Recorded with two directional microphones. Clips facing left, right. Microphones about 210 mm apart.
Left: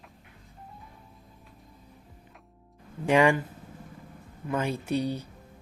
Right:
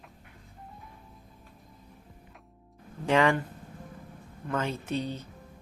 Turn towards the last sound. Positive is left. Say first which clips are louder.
# left 4 dB
turn(degrees=10)  # may be behind; listen again after turning